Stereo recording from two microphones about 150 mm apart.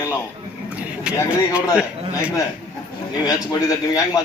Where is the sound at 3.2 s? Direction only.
25° left (ahead or behind).